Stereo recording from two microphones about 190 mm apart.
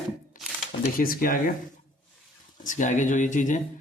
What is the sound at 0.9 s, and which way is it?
Speech, 50° left (ahead or behind).